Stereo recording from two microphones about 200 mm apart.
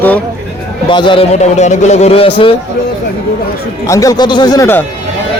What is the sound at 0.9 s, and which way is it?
A man's voice, 25° left (ahead or behind).